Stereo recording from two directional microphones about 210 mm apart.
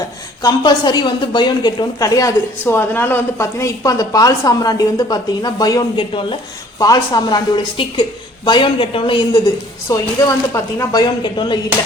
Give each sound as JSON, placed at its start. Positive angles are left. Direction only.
{"t": 0.4, "sound": "a woman's voice", "side_deg": 20}